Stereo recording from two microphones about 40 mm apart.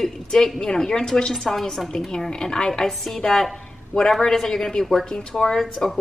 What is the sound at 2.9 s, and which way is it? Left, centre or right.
A woman's voice, centre.